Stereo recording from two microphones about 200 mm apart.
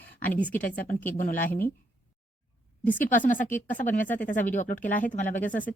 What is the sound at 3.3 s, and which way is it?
Speech, 40° left (ahead or behind).